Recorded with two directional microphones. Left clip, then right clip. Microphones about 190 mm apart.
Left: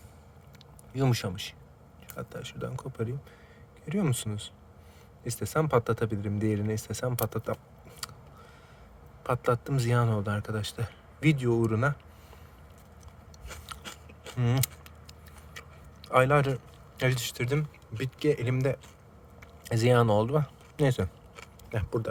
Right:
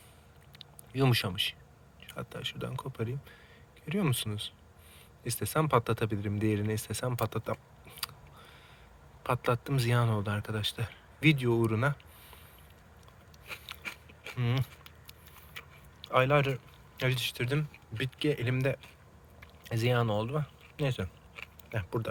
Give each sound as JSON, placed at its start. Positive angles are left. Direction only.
{"t": 0.6, "sound": "a man's voice", "side_deg": 5}
{"t": 14.3, "sound": "keys jangling", "side_deg": 20}
{"t": 15.5, "sound": "a sound", "side_deg": 20}
{"t": 17.0, "sound": "a man's voice", "side_deg": 20}
{"t": 19.4, "sound": "a sound", "side_deg": 25}
{"t": 21.7, "sound": "a man's voice", "side_deg": 15}